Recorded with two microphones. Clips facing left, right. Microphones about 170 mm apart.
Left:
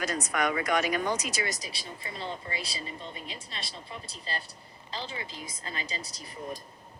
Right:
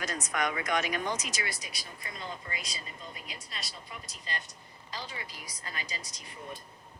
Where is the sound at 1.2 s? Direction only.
40° left (ahead or behind).